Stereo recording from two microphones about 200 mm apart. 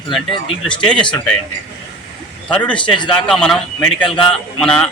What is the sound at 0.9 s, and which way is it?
Speech, 25° left (ahead or behind).